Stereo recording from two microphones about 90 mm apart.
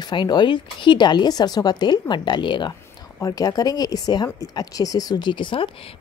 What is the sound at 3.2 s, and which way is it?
A woman's voice, 45° left (ahead or behind).